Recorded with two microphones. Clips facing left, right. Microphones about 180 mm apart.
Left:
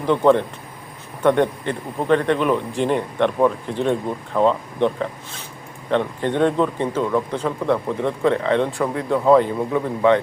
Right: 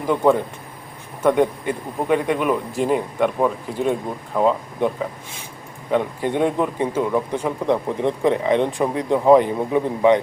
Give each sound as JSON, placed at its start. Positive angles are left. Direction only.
{"t": 0.0, "sound": "a man's voice", "side_deg": -10}
{"t": 5.9, "sound": "a man's voice", "side_deg": -10}